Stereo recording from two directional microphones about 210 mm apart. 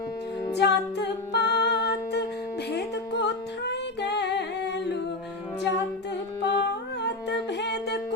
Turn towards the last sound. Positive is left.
turn(degrees=50)  # may be behind; listen again after turning